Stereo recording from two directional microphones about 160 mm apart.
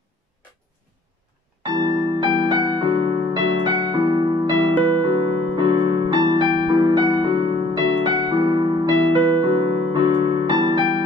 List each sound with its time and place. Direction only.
1.6 s music: 25° right (ahead or behind)